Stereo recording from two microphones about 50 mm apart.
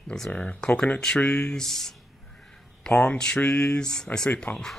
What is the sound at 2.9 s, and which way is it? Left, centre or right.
Speech, left.